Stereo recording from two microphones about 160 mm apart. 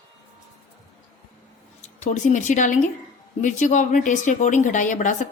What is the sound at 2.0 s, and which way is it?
Speech, 50° left (ahead or behind).